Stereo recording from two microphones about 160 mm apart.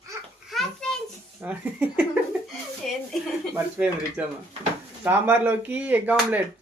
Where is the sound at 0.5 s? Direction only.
Centre (ahead or behind).